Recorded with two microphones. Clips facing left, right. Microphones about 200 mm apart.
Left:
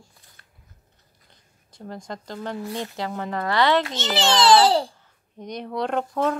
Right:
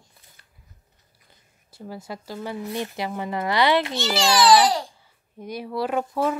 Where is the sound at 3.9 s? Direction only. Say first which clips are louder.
Right 1 dB; 25° left (ahead or behind).